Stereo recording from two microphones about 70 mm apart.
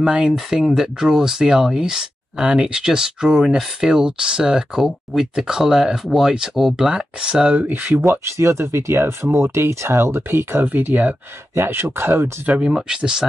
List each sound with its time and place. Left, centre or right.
0.0 s speech: centre; by 8.0 s right
8.0 s speech: right
11.5 s speech: right
12.4 s speech: centre